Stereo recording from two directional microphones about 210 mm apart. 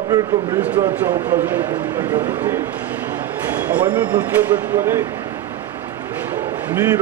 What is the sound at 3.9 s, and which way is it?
Speech, 5° right (ahead or behind).